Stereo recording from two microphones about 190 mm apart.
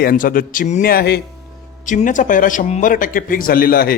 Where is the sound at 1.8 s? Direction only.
40° left (ahead or behind).